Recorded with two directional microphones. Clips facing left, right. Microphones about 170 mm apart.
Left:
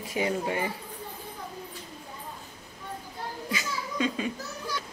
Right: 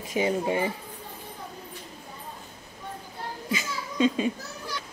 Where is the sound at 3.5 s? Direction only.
25° right (ahead or behind).